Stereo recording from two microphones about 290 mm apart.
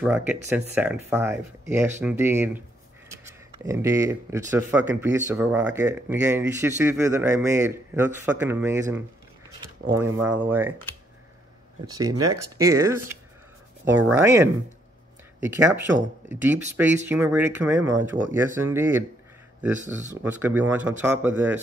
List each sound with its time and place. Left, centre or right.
0.0 s speech: centre
10.2 s speech: centre
12.4 s speech: centre
20.3 s speech: centre